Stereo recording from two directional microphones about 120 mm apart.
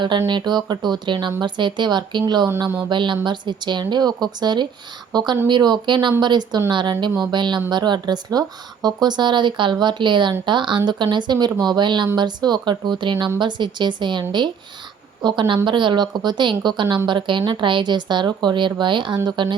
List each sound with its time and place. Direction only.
0.3 s speech: 40° right (ahead or behind)